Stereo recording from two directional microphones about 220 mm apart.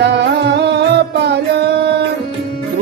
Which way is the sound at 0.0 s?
50° right (ahead or behind).